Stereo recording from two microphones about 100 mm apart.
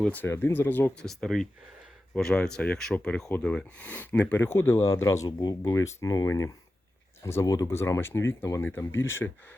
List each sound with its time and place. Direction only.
0.0 s speech: 15° left (ahead or behind)
0.9 s speech: 5° left (ahead or behind); by 9.3 s 25° left (ahead or behind)